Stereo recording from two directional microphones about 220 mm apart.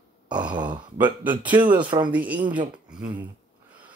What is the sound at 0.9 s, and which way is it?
Speech, 10° right (ahead or behind).